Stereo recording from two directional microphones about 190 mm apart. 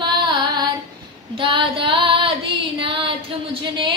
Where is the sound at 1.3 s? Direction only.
25° right (ahead or behind).